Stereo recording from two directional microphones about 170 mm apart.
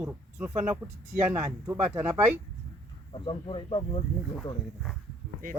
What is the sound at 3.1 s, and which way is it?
Speech, 30° left (ahead or behind).